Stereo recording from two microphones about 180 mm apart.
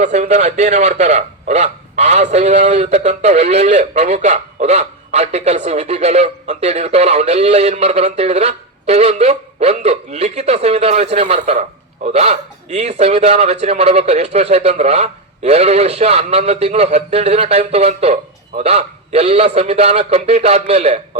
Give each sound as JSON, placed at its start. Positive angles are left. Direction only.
{"t": 0.0, "sound": "a man's voice", "side_deg": -40}